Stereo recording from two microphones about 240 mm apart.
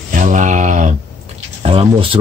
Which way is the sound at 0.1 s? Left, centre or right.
Right.